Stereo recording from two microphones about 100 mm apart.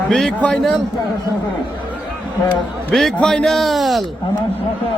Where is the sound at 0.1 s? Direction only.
10° left (ahead or behind).